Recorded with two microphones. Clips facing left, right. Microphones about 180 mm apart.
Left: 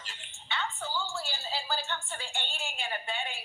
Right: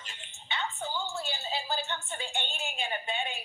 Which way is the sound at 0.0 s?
20° right (ahead or behind).